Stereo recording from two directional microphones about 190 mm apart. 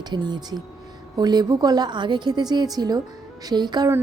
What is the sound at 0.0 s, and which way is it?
Speech, 25° right (ahead or behind).